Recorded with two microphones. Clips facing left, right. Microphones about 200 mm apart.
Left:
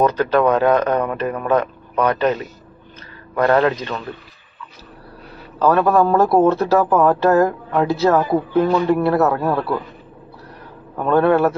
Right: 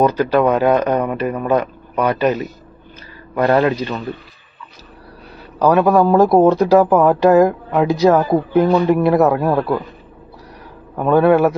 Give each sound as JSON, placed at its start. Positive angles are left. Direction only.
{"t": 0.0, "sound": "speech", "side_deg": -10}
{"t": 3.3, "sound": "speech", "side_deg": -10}
{"t": 5.6, "sound": "speech", "side_deg": -15}
{"t": 11.0, "sound": "speech", "side_deg": -10}